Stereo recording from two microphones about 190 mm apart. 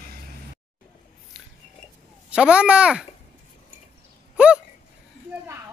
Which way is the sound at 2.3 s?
5° right (ahead or behind).